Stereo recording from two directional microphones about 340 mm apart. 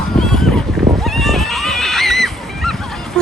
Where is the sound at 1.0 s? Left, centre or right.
Centre.